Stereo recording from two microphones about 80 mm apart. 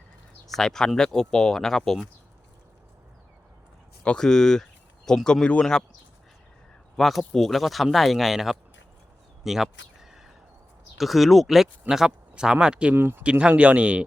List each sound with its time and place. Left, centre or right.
0.4 s speech: centre
4.0 s speech: centre
6.9 s speech: centre
9.4 s a sound: centre
10.9 s speech: centre
12.9 s speech: right